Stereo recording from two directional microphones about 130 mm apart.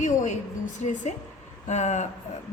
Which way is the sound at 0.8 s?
65° left (ahead or behind).